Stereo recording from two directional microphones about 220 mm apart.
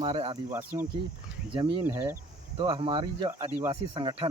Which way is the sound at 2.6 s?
25° right (ahead or behind).